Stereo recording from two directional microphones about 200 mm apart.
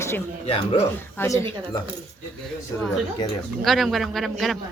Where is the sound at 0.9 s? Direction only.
10° left (ahead or behind).